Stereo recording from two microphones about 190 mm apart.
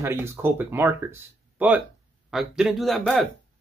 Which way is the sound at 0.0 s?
15° right (ahead or behind).